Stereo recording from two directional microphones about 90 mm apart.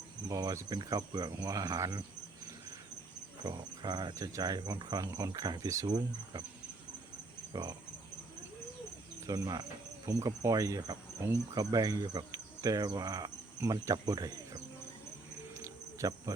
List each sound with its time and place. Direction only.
0.3 s cricket: 40° right (ahead or behind)
3.4 s cricket: 55° right (ahead or behind)
4.1 s cricket: 40° right (ahead or behind)
7.5 s cricket: 50° right (ahead or behind)
9.2 s speech: 40° right (ahead or behind)
11.5 s cricket: 45° right (ahead or behind)
15.5 s cricket: 35° right (ahead or behind)